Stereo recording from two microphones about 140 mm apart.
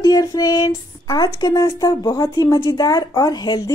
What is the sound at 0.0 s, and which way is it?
Speech, 25° left (ahead or behind).